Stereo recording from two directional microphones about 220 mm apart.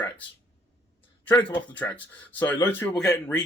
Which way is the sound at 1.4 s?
20° left (ahead or behind).